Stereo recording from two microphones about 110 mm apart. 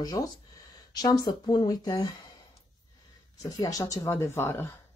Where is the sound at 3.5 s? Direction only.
35° left (ahead or behind).